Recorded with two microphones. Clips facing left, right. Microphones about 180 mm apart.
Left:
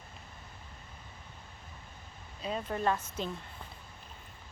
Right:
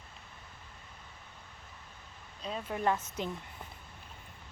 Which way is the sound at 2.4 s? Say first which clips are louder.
Left 3 dB; centre (ahead or behind).